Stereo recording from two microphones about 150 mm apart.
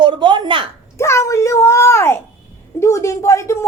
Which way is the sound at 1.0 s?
20° left (ahead or behind).